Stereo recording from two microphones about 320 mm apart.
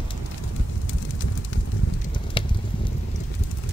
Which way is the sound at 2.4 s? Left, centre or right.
Centre.